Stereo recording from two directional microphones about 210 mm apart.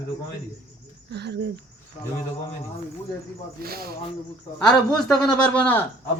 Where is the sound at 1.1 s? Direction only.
50° right (ahead or behind).